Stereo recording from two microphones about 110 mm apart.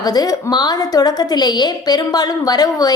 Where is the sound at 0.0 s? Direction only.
35° left (ahead or behind).